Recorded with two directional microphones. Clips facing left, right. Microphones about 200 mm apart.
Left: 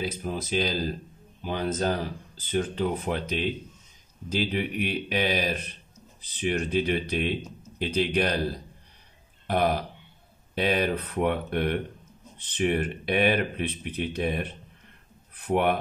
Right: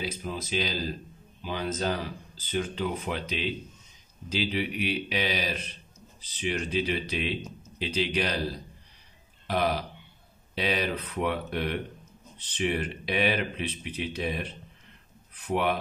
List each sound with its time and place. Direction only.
0.0 s speech: 50° left (ahead or behind)